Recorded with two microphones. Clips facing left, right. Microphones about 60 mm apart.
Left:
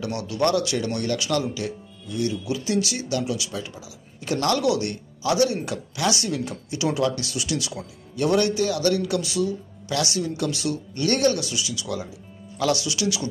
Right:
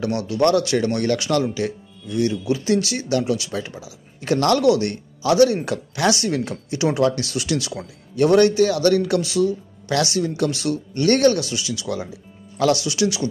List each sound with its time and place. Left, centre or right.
0.4 s a man's voice: right